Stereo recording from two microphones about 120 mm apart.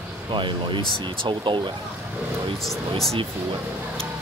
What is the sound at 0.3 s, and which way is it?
Speech, 40° right (ahead or behind).